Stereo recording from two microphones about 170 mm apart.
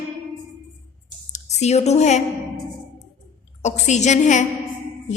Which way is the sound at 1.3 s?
40° left (ahead or behind).